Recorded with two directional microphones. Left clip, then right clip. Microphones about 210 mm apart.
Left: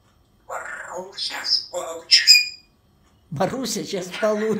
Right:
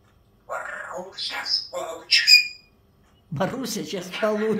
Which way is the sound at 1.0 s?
5° right (ahead or behind).